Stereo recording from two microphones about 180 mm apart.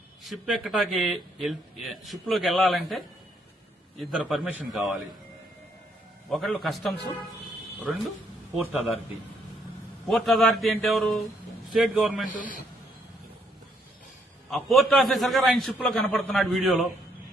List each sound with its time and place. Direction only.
0.2 s speech: centre (ahead or behind)
4.1 s speech: centre (ahead or behind)
6.3 s speech: centre (ahead or behind)
10.1 s speech: centre (ahead or behind)
12.3 s a man's voice: 50° left (ahead or behind)
14.5 s speech: centre (ahead or behind)